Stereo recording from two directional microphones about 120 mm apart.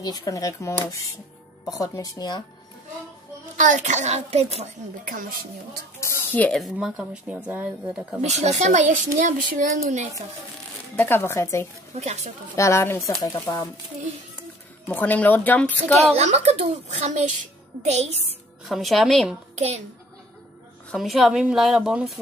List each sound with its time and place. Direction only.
0.0 s speech: 30° left (ahead or behind)
1.8 s speech: 30° left (ahead or behind)
3.5 s a woman's voice: 90° right; by 4.6 s 60° right (ahead or behind)
5.9 s a sound: 20° left (ahead or behind)
6.6 s speech: 5° right (ahead or behind)
8.2 s a child's voice: 70° right (ahead or behind); by 10.0 s 90° right
11.0 s speech: 20° left (ahead or behind)
11.9 s a woman's voice: 65° right (ahead or behind)
12.5 s speech: 25° left (ahead or behind)
14.9 s speech: 15° left (ahead or behind)
16.0 s a woman's voice: 65° right (ahead or behind)
18.7 s a woman's voice: centre (ahead or behind)
19.5 s a child's voice: 65° right (ahead or behind)
20.9 s a woman's voice: centre (ahead or behind)